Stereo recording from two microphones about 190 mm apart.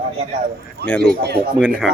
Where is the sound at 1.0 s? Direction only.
55° right (ahead or behind).